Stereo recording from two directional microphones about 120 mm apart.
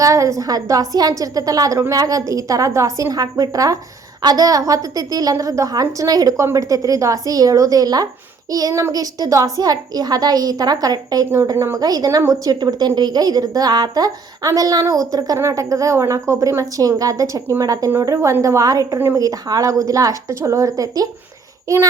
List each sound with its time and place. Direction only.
0.0 s a woman's voice: 25° right (ahead or behind)
11.3 s a woman's voice: 20° right (ahead or behind)